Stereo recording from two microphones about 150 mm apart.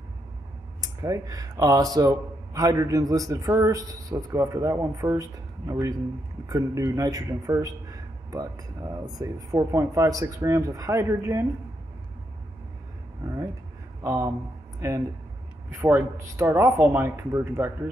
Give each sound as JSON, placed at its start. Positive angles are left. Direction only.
{"t": 0.7, "sound": "a man's voice", "side_deg": -25}
{"t": 13.2, "sound": "a man's voice", "side_deg": -20}